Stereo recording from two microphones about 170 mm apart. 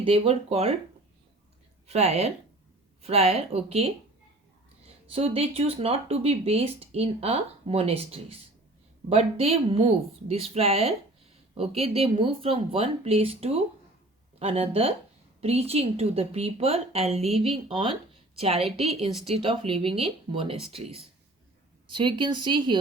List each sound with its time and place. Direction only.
0.0 s speech: 35° right (ahead or behind)
1.9 s speech: 40° right (ahead or behind)
5.1 s speech: 35° right (ahead or behind)